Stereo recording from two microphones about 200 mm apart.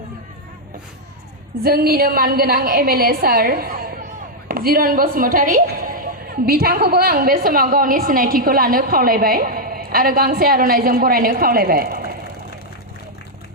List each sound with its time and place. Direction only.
1.6 s a woman's voice: 50° right (ahead or behind)